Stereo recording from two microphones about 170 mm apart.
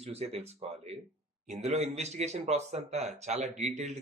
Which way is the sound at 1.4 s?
40° right (ahead or behind).